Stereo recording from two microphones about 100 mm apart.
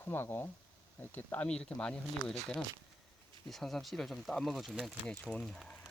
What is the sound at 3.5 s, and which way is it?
Speech, centre (ahead or behind).